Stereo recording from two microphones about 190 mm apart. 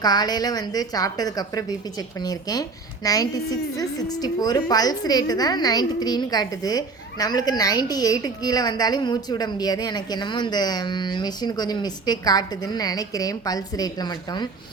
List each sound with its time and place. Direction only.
0.0 s a woman's voice: 20° left (ahead or behind)